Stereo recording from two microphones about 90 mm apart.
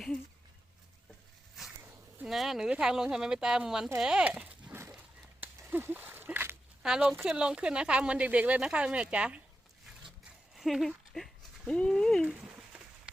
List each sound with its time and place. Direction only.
2.2 s speech: 5° right (ahead or behind)
4.9 s a sound: 20° right (ahead or behind)
6.8 s speech: 5° right (ahead or behind)
10.5 s a sound: centre (ahead or behind)
11.8 s speech: 5° left (ahead or behind)
12.2 s speech: 15° right (ahead or behind)